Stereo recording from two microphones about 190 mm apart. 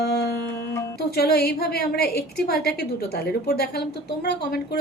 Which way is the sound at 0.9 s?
55° left (ahead or behind).